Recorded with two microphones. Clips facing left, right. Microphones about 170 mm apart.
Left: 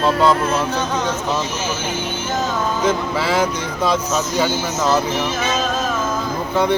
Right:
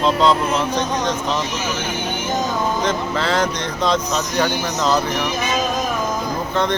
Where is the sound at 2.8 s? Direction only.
10° left (ahead or behind).